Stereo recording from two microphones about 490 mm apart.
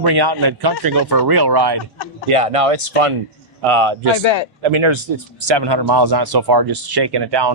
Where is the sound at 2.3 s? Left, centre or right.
Right.